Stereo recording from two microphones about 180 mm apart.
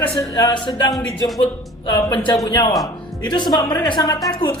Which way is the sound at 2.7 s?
Centre (ahead or behind).